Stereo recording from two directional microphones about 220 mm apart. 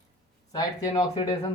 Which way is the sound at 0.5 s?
15° left (ahead or behind).